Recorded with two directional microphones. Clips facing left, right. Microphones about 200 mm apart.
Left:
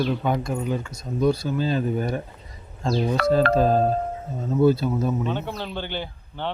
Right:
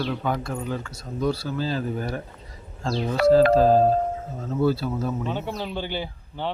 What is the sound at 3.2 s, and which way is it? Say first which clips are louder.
Speech: right 5 dB; 20° left (ahead or behind).